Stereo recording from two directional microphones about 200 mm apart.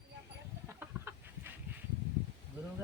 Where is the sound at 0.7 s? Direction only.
10° right (ahead or behind).